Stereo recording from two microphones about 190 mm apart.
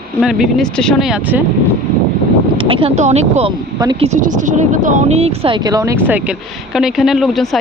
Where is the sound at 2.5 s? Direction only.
25° right (ahead or behind).